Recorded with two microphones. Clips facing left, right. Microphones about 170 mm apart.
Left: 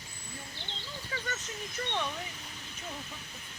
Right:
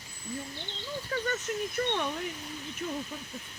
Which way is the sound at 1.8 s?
50° right (ahead or behind).